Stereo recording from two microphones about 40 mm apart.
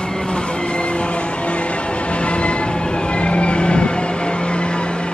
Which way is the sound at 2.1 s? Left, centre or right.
Left.